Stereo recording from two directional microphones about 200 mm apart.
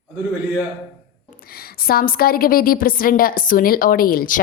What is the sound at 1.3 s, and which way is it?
A woman's voice, 45° left (ahead or behind).